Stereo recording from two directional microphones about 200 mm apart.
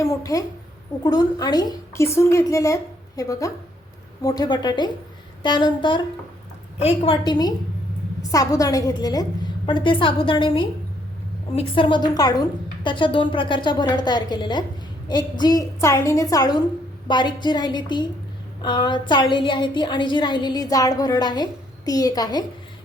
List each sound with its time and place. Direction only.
0.0 s a woman's voice: 15° left (ahead or behind)